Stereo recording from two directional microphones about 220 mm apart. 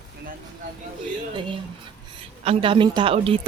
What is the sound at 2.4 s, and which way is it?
Speech, 25° right (ahead or behind).